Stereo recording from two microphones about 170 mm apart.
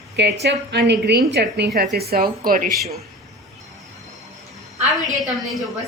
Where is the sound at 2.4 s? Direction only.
55° right (ahead or behind).